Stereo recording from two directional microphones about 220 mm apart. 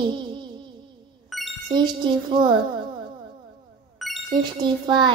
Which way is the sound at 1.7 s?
20° right (ahead or behind).